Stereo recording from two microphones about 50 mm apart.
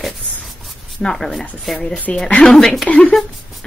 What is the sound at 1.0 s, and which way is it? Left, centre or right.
Speech, centre.